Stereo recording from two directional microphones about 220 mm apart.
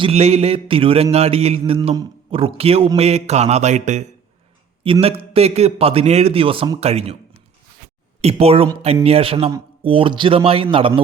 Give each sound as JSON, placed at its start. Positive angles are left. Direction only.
{"t": 0.0, "sound": "mantra", "side_deg": -30}
{"t": 8.2, "sound": "mantra", "side_deg": -25}